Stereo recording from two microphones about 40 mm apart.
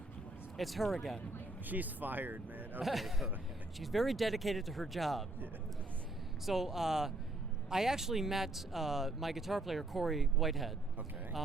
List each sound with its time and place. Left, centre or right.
0.5 s speech: centre
1.6 s speech: right
2.8 s speech: centre
6.4 s speech: centre